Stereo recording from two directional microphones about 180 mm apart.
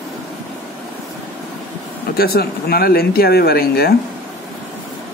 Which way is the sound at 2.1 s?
60° left (ahead or behind).